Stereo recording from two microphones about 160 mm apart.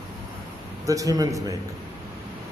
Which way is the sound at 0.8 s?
20° right (ahead or behind).